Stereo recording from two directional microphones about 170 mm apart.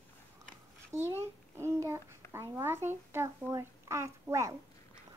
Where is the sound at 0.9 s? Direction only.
15° right (ahead or behind).